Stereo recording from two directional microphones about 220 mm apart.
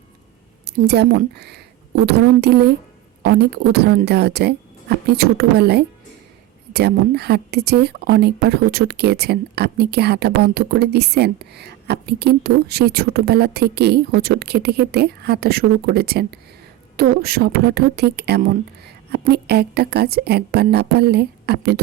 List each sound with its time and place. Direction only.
0.6 s a woman's voice: 50° right (ahead or behind)